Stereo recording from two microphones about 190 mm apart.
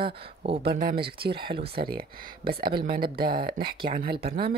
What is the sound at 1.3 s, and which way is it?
Speech, 25° right (ahead or behind).